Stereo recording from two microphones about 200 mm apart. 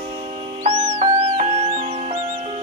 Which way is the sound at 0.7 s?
25° right (ahead or behind).